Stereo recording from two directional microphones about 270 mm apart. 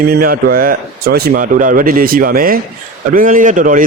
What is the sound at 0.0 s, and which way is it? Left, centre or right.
A man's voice, right.